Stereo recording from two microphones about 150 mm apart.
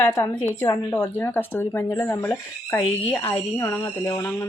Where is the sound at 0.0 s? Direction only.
15° left (ahead or behind).